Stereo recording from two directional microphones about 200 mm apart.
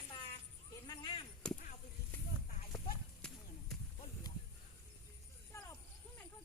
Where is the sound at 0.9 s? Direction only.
20° left (ahead or behind).